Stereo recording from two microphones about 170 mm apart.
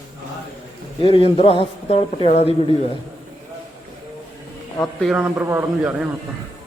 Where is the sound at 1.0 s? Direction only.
35° left (ahead or behind).